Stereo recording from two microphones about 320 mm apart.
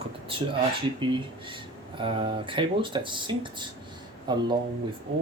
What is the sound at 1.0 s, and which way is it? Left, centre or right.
Speech, centre.